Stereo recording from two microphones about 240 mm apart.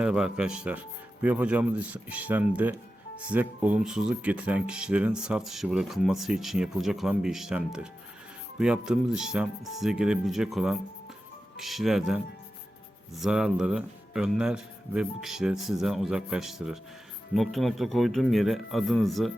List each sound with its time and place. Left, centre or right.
0.0 s speech: centre